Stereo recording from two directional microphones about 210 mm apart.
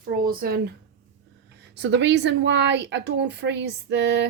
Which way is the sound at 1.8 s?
55° right (ahead or behind).